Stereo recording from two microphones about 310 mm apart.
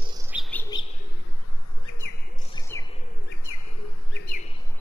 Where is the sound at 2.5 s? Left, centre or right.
Centre.